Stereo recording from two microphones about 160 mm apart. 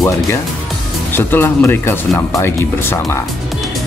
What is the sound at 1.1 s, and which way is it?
Speech, 15° left (ahead or behind).